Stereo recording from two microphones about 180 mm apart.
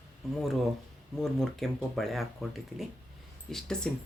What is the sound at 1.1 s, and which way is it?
Speech, 5° left (ahead or behind).